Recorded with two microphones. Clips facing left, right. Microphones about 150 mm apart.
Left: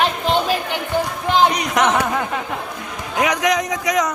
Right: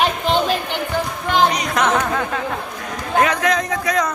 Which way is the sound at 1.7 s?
15° left (ahead or behind).